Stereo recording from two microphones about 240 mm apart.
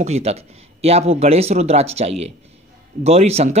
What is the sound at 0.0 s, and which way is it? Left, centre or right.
Speech, right.